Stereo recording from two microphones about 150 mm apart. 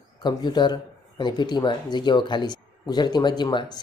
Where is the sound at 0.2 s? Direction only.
30° left (ahead or behind).